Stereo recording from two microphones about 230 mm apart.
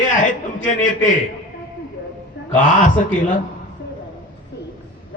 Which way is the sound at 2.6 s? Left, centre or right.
Left.